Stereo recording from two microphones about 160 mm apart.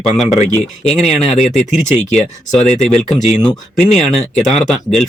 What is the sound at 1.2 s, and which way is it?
Speech, 45° left (ahead or behind).